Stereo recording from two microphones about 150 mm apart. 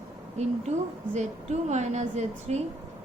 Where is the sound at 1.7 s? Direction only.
50° right (ahead or behind).